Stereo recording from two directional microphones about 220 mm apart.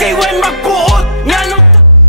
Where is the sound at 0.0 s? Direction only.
Centre (ahead or behind).